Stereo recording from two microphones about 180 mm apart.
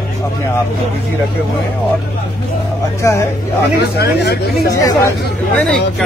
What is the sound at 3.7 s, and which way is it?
Speech, 60° left (ahead or behind).